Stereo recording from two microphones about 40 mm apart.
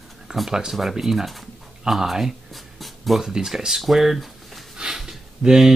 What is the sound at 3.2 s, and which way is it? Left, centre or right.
Speech, centre.